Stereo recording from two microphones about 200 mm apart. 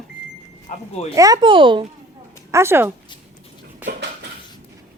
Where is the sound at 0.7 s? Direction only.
35° left (ahead or behind).